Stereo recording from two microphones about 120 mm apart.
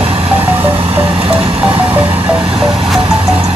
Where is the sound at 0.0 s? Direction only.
55° right (ahead or behind).